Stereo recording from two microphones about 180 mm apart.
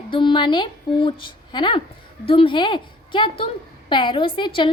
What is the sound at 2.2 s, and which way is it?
A woman's voice, 30° left (ahead or behind).